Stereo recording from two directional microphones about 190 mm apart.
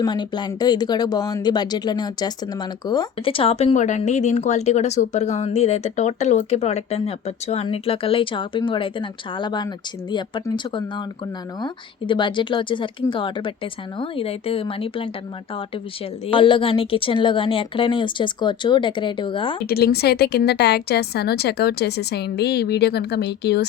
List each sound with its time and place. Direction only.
0.0 s speech: 25° left (ahead or behind)
16.2 s speech: 25° left (ahead or behind)
19.6 s a woman's voice: 55° left (ahead or behind)